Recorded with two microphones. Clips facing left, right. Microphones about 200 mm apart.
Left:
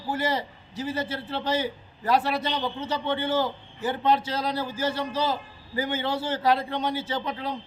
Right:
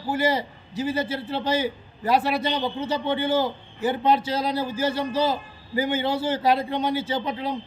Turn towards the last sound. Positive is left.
turn(degrees=-10)  # may be behind; listen again after turning